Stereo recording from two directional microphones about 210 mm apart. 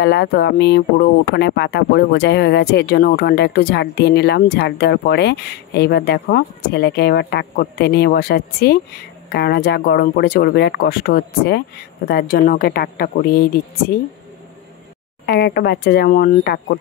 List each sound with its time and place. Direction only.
0.0 s speech: 50° left (ahead or behind)
15.2 s speech: 50° left (ahead or behind)